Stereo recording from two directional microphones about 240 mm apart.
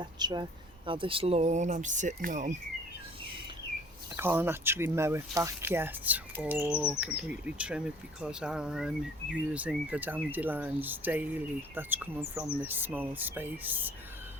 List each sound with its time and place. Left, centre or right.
0.0 s speech: centre
4.2 s speech: centre